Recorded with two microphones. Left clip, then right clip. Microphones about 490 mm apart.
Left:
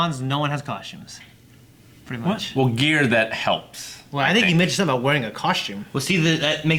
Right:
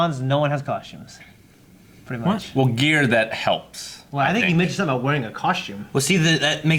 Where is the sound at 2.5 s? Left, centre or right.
Centre.